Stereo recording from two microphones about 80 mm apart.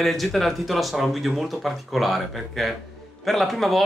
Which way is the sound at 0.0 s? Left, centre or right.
Centre.